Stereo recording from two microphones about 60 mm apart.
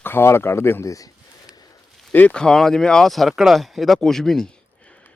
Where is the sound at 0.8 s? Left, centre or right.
Left.